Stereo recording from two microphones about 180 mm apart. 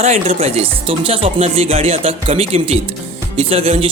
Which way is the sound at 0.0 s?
35° right (ahead or behind).